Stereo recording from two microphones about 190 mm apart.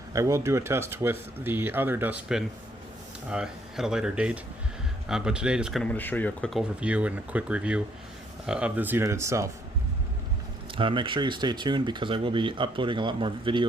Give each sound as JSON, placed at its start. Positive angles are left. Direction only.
{"t": 0.1, "sound": "speech", "side_deg": -15}
{"t": 10.8, "sound": "speech", "side_deg": -25}